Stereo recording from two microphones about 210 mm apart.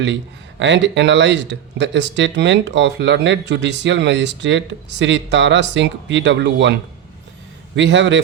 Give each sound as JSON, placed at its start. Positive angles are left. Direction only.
{"t": 0.6, "sound": "speech", "side_deg": -60}
{"t": 7.8, "sound": "speech", "side_deg": -60}